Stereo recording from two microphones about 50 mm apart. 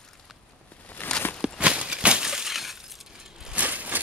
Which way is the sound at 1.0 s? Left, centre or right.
Left.